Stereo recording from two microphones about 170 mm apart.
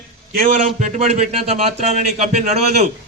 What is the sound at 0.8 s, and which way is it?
A man's voice, 40° right (ahead or behind).